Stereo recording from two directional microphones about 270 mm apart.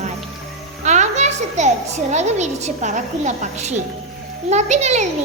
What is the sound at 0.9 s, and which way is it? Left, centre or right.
A child's voice, right.